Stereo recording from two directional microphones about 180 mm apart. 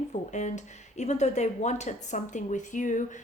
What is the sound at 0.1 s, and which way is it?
Speech, 40° left (ahead or behind).